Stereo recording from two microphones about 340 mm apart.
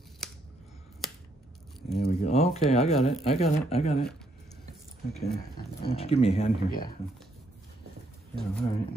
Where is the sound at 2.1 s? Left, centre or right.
Centre.